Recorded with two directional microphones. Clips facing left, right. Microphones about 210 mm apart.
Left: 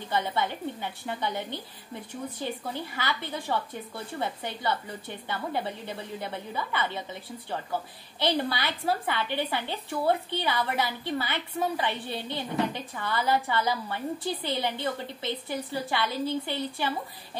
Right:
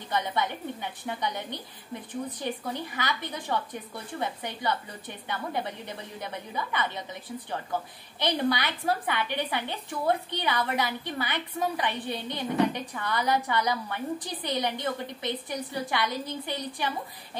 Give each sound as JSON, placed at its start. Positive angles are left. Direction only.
{"t": 0.1, "sound": "a woman's voice", "side_deg": -15}
{"t": 8.2, "sound": "a woman's voice", "side_deg": -15}